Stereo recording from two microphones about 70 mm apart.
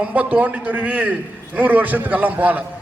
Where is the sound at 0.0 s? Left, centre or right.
Right.